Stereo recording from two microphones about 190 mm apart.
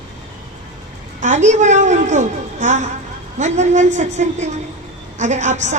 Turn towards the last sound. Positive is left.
turn(degrees=-40)  # may be behind; listen again after turning